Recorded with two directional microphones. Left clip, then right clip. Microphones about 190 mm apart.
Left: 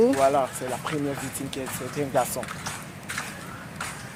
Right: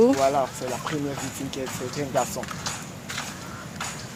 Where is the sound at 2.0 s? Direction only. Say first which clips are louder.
Left 3 dB; 55° left (ahead or behind).